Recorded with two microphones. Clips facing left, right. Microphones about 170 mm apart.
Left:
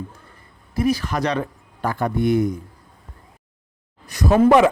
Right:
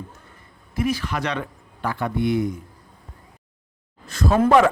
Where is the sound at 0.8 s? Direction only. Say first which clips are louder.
Left 3 dB; 35° left (ahead or behind).